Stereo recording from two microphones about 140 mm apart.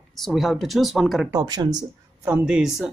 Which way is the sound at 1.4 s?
30° right (ahead or behind).